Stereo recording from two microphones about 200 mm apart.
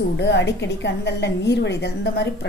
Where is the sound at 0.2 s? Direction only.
60° left (ahead or behind).